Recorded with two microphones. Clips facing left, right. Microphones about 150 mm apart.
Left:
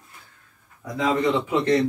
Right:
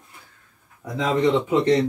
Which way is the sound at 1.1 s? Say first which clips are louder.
Right 3 dB; 20° right (ahead or behind).